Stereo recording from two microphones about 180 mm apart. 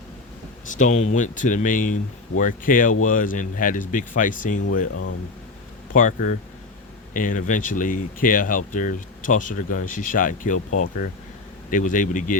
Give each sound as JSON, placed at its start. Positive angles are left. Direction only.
{"t": 0.7, "sound": "speech", "side_deg": 45}
{"t": 5.9, "sound": "speech", "side_deg": 45}